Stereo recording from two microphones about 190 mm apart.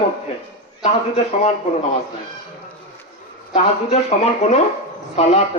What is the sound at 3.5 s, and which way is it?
Speech, 35° left (ahead or behind).